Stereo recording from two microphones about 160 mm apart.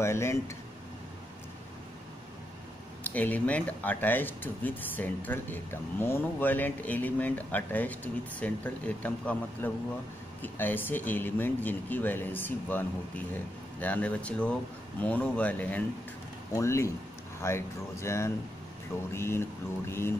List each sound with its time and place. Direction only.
0.0 s speech: 15° left (ahead or behind)
3.0 s speech: 10° left (ahead or behind)